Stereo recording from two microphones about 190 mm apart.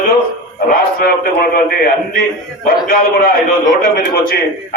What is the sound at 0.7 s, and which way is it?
A man's voice, 50° left (ahead or behind).